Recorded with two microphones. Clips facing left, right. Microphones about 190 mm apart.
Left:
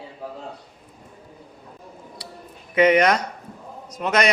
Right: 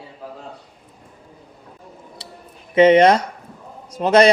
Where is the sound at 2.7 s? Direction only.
25° right (ahead or behind).